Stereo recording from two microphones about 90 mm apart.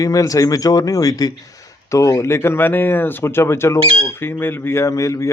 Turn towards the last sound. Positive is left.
turn(degrees=35)  # may be behind; listen again after turning